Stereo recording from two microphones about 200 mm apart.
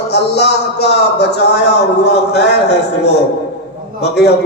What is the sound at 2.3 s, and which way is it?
Speech, 55° left (ahead or behind).